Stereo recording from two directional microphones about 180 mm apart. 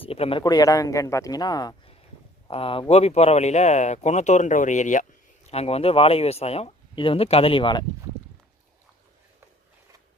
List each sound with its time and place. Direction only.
0.0 s speech: 30° left (ahead or behind)